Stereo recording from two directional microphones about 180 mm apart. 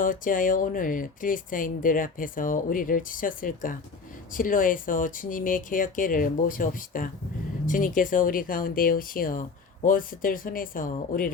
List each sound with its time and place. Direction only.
0.0 s speech: 50° left (ahead or behind)